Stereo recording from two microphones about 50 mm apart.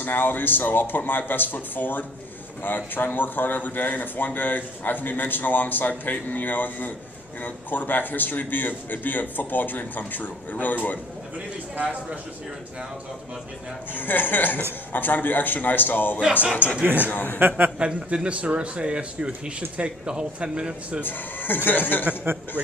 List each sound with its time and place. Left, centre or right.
0.0 s a man's voice: left
13.9 s a man's voice: left
16.8 s a man's voice: right
17.1 s a man's voice: left
17.7 s speech: centre
21.0 s a man's voice: left
22.2 s a man's voice: right